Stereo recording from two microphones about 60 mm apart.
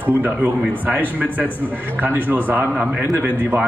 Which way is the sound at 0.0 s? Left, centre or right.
Right.